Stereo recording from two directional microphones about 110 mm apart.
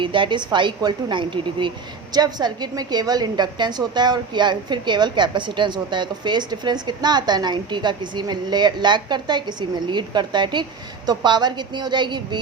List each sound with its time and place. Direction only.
0.0 s a woman's voice: 50° right (ahead or behind)